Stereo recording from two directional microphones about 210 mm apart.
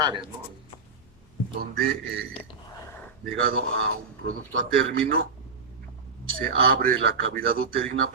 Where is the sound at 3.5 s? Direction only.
70° right (ahead or behind).